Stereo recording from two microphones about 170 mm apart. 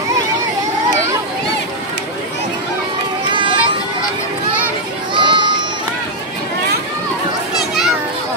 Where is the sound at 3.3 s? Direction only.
30° right (ahead or behind).